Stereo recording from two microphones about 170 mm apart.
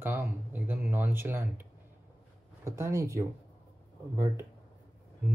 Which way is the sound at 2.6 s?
15° right (ahead or behind).